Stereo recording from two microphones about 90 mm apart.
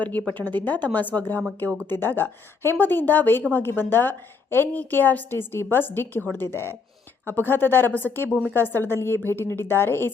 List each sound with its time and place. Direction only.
0.0 s a woman's voice: 20° left (ahead or behind)